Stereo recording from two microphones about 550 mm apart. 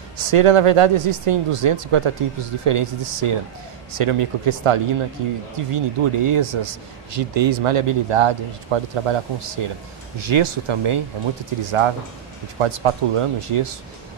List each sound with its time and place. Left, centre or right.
0.2 s speech: right